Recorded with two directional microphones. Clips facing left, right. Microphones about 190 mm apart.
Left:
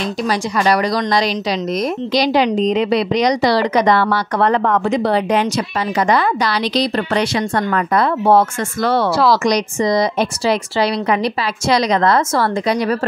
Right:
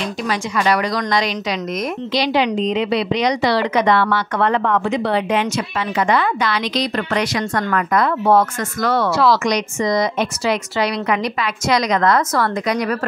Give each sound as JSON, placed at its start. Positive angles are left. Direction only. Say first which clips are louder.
{"t": 0.3, "sound": "a woman's voice", "louder": "left 2 dB", "side_deg": 35}